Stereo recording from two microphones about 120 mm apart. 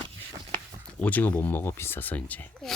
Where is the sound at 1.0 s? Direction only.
15° left (ahead or behind).